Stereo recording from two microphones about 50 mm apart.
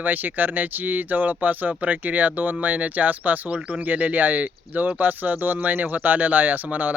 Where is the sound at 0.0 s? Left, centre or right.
Right.